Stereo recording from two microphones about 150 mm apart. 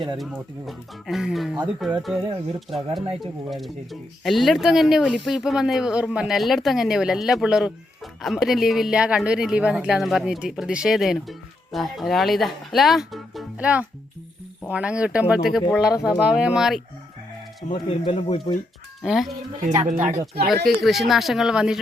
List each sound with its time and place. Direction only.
0.2 s a woman's voice: centre (ahead or behind)
17.7 s speech: 35° left (ahead or behind)
19.0 s a woman's voice: centre (ahead or behind)
19.8 s speech: 60° right (ahead or behind); by 20.5 s 80° right
20.7 s a woman's voice: centre (ahead or behind)